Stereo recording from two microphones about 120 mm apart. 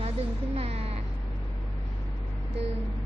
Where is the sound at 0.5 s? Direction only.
55° right (ahead or behind).